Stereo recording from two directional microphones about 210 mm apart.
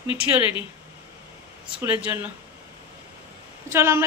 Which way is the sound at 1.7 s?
10° right (ahead or behind).